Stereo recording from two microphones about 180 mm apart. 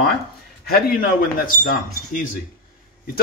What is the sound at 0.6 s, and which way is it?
Speech, 55° left (ahead or behind).